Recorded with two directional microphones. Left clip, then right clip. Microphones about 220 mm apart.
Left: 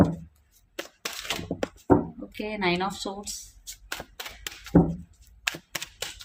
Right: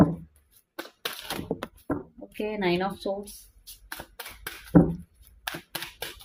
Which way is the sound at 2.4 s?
20° left (ahead or behind).